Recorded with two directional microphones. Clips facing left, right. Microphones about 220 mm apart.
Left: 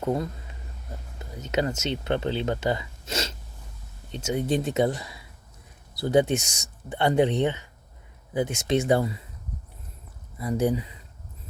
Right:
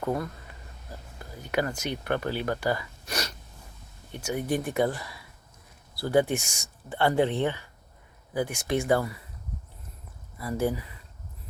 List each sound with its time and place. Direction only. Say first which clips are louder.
0.0 s speech: left 3 dB; 20° left (ahead or behind)
10.3 s speech: left 3 dB; 20° left (ahead or behind)